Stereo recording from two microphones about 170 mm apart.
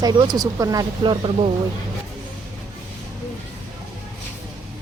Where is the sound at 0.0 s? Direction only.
25° right (ahead or behind).